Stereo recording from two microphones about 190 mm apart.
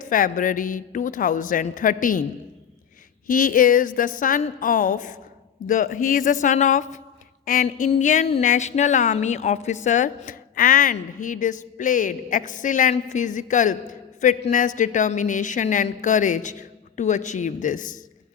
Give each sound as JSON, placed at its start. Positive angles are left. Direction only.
{"t": 0.0, "sound": "speech", "side_deg": 45}
{"t": 3.2, "sound": "a woman's voice", "side_deg": 45}